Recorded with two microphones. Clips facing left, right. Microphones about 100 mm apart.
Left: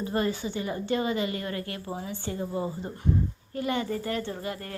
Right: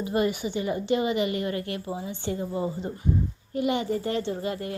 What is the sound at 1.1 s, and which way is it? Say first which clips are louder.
Speech: right 3 dB; 35° left (ahead or behind).